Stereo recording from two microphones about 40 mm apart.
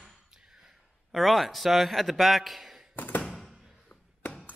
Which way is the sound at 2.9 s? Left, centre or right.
Left.